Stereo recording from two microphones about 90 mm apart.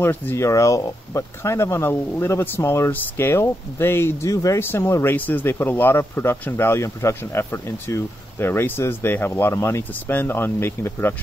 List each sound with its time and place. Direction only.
0.0 s speech: 25° left (ahead or behind)
0.5 s speech: 40° left (ahead or behind)
4.6 s speech: 25° left (ahead or behind)